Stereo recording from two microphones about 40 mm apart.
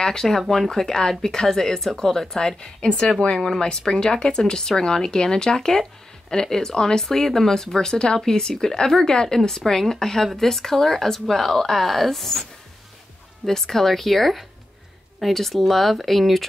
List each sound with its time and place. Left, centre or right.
0.0 s speech: centre
3.3 s speech: centre
3.6 s speech: centre
13.5 s speech: centre